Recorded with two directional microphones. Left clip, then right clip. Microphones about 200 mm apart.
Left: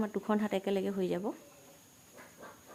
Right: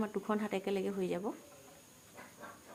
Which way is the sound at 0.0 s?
20° left (ahead or behind).